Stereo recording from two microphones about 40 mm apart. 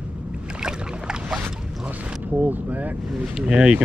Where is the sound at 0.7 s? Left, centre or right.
Centre.